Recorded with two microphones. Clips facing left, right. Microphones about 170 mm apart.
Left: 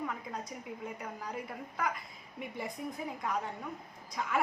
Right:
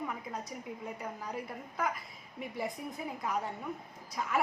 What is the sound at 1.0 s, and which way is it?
A woman's voice, centre (ahead or behind).